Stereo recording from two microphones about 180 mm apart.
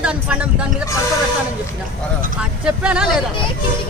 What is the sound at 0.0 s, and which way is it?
Speech, 5° right (ahead or behind).